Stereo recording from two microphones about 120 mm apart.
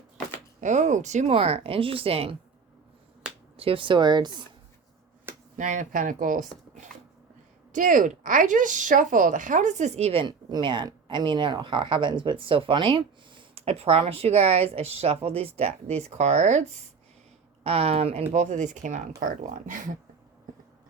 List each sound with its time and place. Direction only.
0.6 s speech: 90° right; by 2.3 s 55° right (ahead or behind)
3.6 s speech: 50° right (ahead or behind)
5.5 s speech: 90° right
7.7 s speech: 90° right; by 10.2 s 55° right (ahead or behind)
10.2 s speech: 40° right (ahead or behind); by 16.6 s 75° right (ahead or behind)
17.6 s speech: 55° right (ahead or behind)
18.3 s speech: 75° right (ahead or behind); by 19.9 s 90° right